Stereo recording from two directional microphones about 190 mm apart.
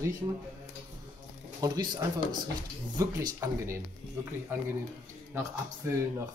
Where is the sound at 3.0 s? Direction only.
15° right (ahead or behind).